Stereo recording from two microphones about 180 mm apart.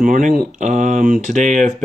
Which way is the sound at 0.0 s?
50° right (ahead or behind).